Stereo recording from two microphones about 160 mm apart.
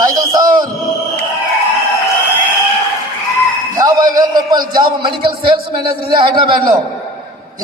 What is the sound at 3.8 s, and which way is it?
A man's voice, 25° right (ahead or behind).